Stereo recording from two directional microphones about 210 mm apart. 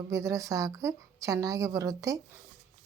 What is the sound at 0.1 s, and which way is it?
A woman's voice, 15° right (ahead or behind).